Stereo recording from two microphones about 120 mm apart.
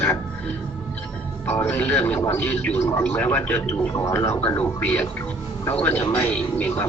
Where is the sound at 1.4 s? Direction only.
20° left (ahead or behind).